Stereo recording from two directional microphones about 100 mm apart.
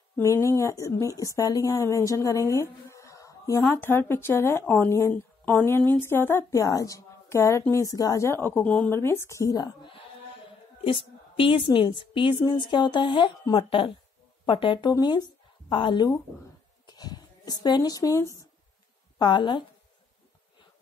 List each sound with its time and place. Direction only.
0.2 s a woman's voice: 30° left (ahead or behind)
3.7 s speech: 25° left (ahead or behind)
6.5 s a woman's voice: 35° left (ahead or behind)
10.8 s a woman's voice: 65° left (ahead or behind)
16.8 s a sound: 45° left (ahead or behind)
19.1 s a woman's voice: 50° left (ahead or behind)